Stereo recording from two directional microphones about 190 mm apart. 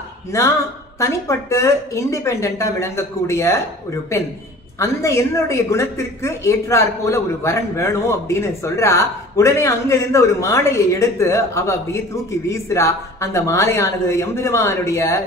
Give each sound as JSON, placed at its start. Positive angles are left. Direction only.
{"t": 0.3, "sound": "a woman's voice", "side_deg": 15}
{"t": 4.7, "sound": "a woman's voice", "side_deg": 15}